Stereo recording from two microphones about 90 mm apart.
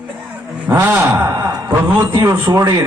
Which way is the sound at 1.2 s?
45° right (ahead or behind).